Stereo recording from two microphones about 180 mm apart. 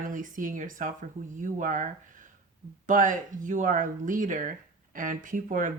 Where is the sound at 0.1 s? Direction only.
45° right (ahead or behind).